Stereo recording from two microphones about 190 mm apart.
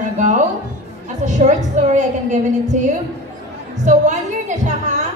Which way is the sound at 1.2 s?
40° right (ahead or behind).